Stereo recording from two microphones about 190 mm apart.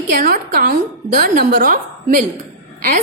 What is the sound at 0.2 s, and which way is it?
A woman's voice, 50° right (ahead or behind).